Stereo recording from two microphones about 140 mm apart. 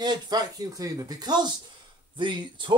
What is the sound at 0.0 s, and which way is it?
Speech, 30° right (ahead or behind).